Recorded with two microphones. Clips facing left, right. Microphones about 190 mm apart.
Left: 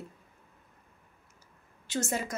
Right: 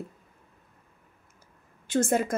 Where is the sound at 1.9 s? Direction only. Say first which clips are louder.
Right 8 dB; 55° right (ahead or behind).